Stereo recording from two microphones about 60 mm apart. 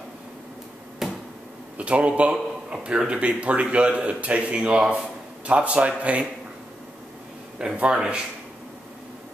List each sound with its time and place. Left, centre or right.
1.0 s finger snapping: centre
1.8 s a man's voice: right
7.5 s speech: centre